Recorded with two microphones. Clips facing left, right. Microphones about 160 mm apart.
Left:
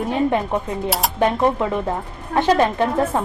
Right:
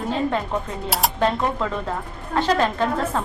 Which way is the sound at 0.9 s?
Centre (ahead or behind).